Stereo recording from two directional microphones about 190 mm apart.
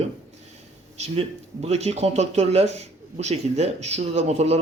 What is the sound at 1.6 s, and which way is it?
Speech, 35° right (ahead or behind).